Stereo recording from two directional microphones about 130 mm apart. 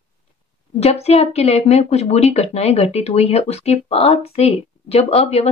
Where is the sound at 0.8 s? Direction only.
55° left (ahead or behind).